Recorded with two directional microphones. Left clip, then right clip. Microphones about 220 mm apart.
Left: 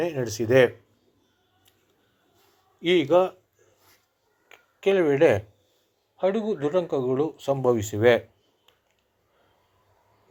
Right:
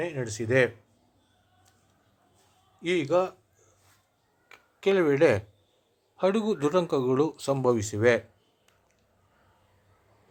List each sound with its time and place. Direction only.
0.0 s speech: 10° left (ahead or behind)
2.8 s a man's voice: centre (ahead or behind)